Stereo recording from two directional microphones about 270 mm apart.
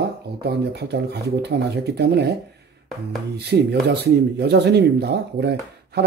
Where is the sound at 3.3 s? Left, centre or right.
Right.